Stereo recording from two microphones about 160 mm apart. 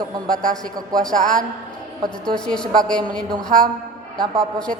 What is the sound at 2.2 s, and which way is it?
A woman's voice, 5° left (ahead or behind).